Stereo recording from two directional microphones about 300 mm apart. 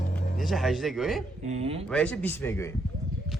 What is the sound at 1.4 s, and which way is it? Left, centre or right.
Speech, right.